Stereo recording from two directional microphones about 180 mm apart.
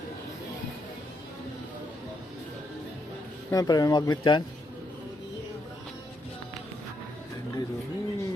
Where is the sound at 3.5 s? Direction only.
20° left (ahead or behind).